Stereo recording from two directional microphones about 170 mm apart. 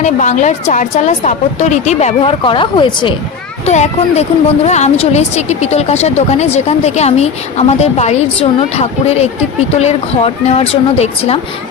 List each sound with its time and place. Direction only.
0.0 s a woman's voice: 45° left (ahead or behind); by 3.2 s 30° left (ahead or behind)
3.7 s a woman's voice: 40° left (ahead or behind)